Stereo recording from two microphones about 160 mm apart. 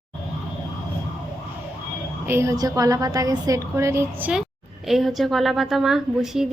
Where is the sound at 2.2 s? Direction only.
15° right (ahead or behind).